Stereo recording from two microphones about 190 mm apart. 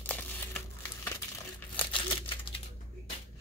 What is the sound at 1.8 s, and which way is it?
Crumpling, 25° left (ahead or behind).